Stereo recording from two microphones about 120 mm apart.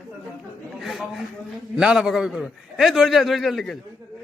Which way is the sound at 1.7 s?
5° right (ahead or behind).